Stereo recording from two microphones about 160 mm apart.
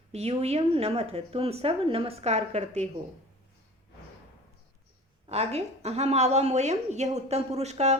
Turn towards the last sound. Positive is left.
turn(degrees=-45)  # may be behind; listen again after turning